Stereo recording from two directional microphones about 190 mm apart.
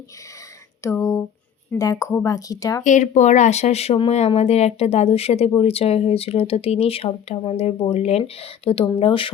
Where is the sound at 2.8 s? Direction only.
40° left (ahead or behind).